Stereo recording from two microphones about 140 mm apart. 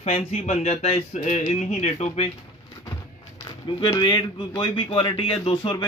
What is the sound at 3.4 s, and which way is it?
Speech, 35° left (ahead or behind).